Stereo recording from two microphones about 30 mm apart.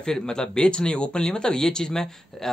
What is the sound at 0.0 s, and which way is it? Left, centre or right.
Speech, left.